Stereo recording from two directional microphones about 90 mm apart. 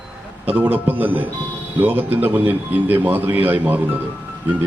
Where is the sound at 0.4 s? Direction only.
15° right (ahead or behind).